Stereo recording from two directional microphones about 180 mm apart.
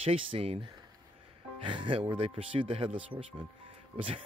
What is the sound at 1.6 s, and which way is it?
Speech, 25° right (ahead or behind).